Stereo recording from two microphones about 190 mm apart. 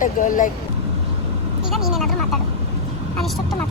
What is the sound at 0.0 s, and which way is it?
Speech, 45° left (ahead or behind).